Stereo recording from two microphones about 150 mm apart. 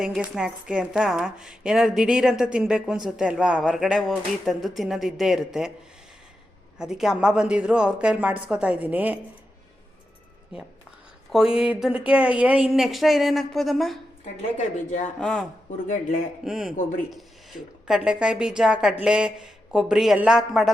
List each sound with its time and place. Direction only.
0.0 s a woman's voice: 5° right (ahead or behind)
6.7 s a woman's voice: 5° right (ahead or behind)
10.5 s speech: 35° left (ahead or behind)
11.3 s a woman's voice: 5° right (ahead or behind)
14.8 s speech: 55° left (ahead or behind)
15.2 s a woman's voice: 5° left (ahead or behind)
15.9 s speech: 60° left (ahead or behind)
16.4 s a woman's voice: 5° right (ahead or behind)
17.8 s a woman's voice: 5° right (ahead or behind)